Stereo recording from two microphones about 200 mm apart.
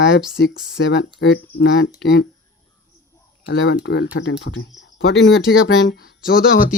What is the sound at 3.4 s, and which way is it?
Speech, 60° left (ahead or behind).